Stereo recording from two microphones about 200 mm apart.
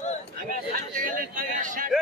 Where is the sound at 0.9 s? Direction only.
40° right (ahead or behind).